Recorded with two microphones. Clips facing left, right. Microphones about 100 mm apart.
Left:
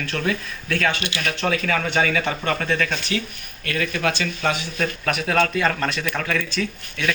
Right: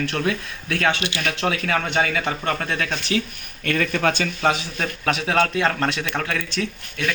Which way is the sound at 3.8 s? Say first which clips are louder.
Right 1 dB; 55° right (ahead or behind).